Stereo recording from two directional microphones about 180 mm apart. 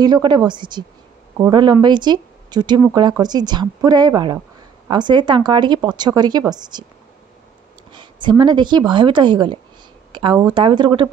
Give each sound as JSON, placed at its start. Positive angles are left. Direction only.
{"t": 0.0, "sound": "speech", "side_deg": -25}
{"t": 7.9, "sound": "speech", "side_deg": -25}